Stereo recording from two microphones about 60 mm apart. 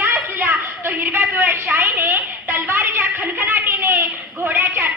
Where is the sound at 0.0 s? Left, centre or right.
Right.